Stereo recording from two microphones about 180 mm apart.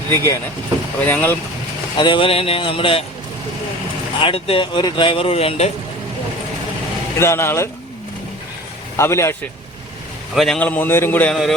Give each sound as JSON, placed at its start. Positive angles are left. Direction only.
{"t": 0.1, "sound": "a man's voice", "side_deg": 15}
{"t": 2.0, "sound": "speech", "side_deg": 25}
{"t": 4.2, "sound": "speech", "side_deg": 30}
{"t": 7.2, "sound": "a man's voice", "side_deg": 15}
{"t": 9.0, "sound": "a man's voice", "side_deg": 15}
{"t": 10.3, "sound": "a man's voice", "side_deg": 0}